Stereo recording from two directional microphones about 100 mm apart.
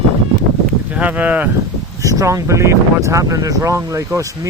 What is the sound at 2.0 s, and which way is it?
Speech, 35° right (ahead or behind).